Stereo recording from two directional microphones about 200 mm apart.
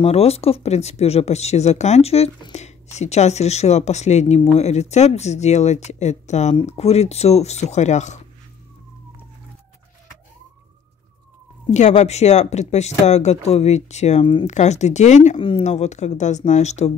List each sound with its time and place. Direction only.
0.0 s speech: 30° left (ahead or behind)
11.7 s speech: 35° left (ahead or behind)